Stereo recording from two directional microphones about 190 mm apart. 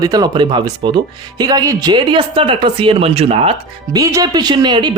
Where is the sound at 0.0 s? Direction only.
20° right (ahead or behind).